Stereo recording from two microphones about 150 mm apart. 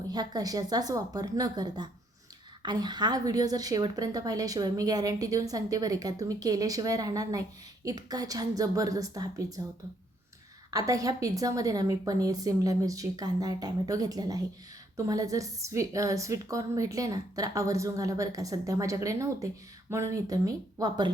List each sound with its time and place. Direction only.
0.1 s a woman's voice: 25° right (ahead or behind)
10.7 s a woman's voice: 25° right (ahead or behind)